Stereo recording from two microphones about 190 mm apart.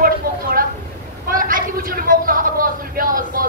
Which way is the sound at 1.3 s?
45° right (ahead or behind).